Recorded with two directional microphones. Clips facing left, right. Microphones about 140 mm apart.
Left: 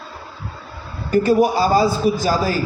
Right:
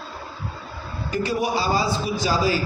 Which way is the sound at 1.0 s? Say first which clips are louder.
Left 9 dB; 50° left (ahead or behind).